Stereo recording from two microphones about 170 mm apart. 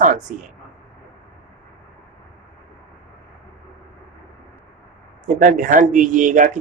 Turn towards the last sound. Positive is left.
turn(degrees=-50)  # may be behind; listen again after turning